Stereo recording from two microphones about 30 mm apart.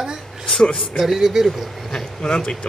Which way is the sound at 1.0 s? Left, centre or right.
Centre.